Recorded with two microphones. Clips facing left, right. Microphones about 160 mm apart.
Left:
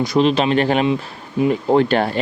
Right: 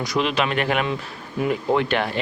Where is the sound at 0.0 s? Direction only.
30° left (ahead or behind).